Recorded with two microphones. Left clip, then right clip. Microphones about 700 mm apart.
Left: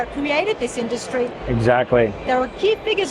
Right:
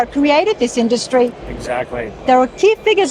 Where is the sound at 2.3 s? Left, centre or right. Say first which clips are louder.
Right 7 dB; right.